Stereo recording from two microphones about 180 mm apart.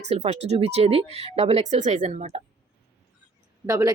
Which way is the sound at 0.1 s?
35° right (ahead or behind).